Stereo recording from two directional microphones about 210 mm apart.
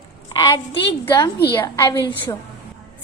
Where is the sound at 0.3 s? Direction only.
20° left (ahead or behind).